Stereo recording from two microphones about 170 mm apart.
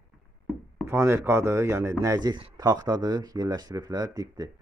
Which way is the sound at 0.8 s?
15° right (ahead or behind).